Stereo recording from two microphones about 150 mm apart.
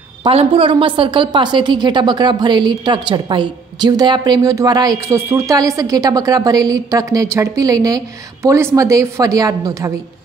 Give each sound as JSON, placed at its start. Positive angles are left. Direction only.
{"t": 0.2, "sound": "a woman's voice", "side_deg": -40}